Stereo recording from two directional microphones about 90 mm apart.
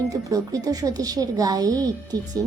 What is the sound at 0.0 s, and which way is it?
A woman's voice, 40° right (ahead or behind).